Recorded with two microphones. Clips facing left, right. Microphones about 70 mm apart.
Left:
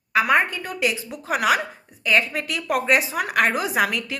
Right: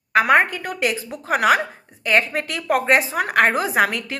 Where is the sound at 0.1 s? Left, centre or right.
Right.